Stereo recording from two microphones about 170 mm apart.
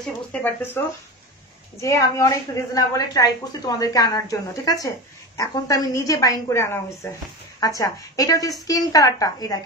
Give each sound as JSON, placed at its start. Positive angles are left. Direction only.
{"t": 0.3, "sound": "speech", "side_deg": 10}
{"t": 1.8, "sound": "a woman's voice", "side_deg": 20}